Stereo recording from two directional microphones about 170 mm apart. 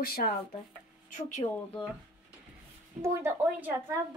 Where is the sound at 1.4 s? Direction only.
25° left (ahead or behind).